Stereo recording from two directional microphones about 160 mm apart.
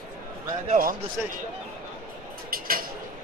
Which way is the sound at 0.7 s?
60° right (ahead or behind).